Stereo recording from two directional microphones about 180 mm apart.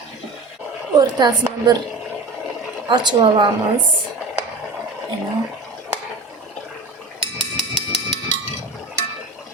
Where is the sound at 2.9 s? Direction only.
25° right (ahead or behind).